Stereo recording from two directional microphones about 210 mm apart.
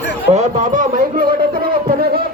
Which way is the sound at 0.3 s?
30° right (ahead or behind).